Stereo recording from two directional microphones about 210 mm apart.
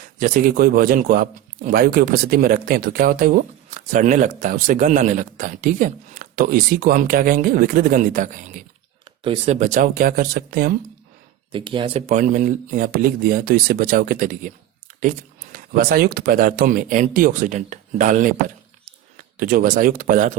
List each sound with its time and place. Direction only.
0.0 s a man's voice: 40° right (ahead or behind)
11.5 s a man's voice: 25° right (ahead or behind); by 14.5 s 40° right (ahead or behind)
15.5 s a man's voice: 45° right (ahead or behind)